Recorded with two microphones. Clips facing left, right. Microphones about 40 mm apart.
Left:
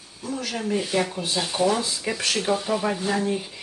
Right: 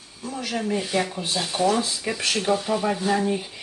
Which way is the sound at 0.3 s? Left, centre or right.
Centre.